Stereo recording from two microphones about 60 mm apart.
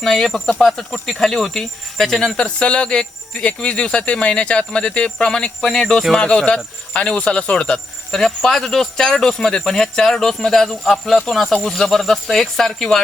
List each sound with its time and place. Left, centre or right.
0.0 s speech: centre